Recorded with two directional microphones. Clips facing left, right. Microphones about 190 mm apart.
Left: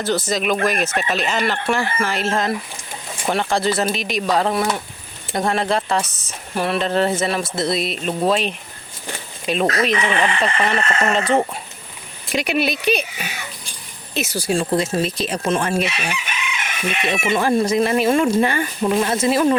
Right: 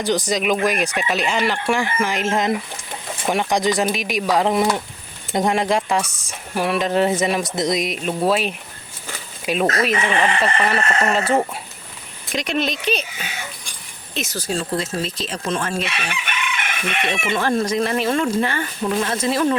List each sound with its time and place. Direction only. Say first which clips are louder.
0.0 s speech: even; 15° right (ahead or behind)
12.3 s speech: left 2 dB; 10° left (ahead or behind)
16.2 s chicken: right 1 dB; 55° right (ahead or behind)
17.1 s speech: left 3 dB; 10° left (ahead or behind)